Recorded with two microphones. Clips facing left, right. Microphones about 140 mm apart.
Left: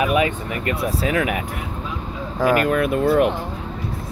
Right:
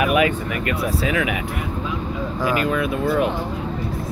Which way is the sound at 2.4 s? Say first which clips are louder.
Left 4 dB; 50° left (ahead or behind).